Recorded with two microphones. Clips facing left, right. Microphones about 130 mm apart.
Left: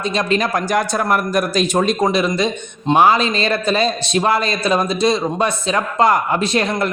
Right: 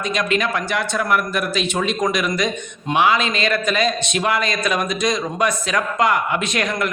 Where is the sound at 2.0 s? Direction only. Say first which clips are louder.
Left 3 dB; 30° left (ahead or behind).